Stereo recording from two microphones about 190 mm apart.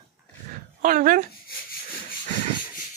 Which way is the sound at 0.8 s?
45° right (ahead or behind).